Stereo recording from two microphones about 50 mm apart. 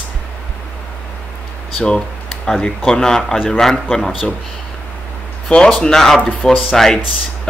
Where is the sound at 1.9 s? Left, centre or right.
Centre.